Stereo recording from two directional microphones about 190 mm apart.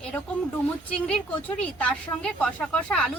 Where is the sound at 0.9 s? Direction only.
5° left (ahead or behind).